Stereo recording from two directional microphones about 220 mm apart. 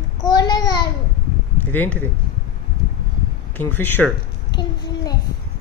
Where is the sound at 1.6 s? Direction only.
5° left (ahead or behind).